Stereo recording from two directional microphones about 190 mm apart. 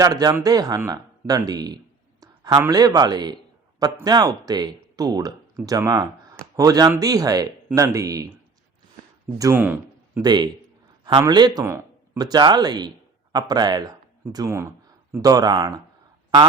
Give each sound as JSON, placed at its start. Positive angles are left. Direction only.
{"t": 0.0, "sound": "speech", "side_deg": -20}
{"t": 9.4, "sound": "speech", "side_deg": -10}
{"t": 10.2, "sound": "speech", "side_deg": -20}